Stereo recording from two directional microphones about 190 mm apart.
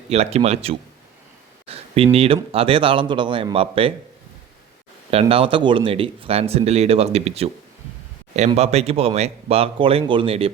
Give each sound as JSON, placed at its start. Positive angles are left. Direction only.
{"t": 0.1, "sound": "speech", "side_deg": -35}
{"t": 1.6, "sound": "a sound", "side_deg": -30}
{"t": 2.1, "sound": "speech", "side_deg": -30}
{"t": 5.1, "sound": "speech", "side_deg": -30}